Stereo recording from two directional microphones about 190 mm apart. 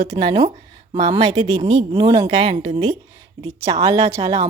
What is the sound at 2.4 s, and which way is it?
Speech, 35° right (ahead or behind).